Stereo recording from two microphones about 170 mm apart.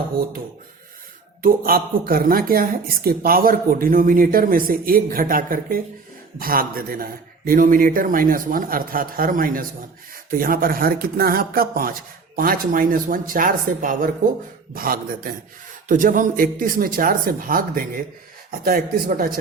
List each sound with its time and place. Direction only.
1.4 s speech: 55° right (ahead or behind)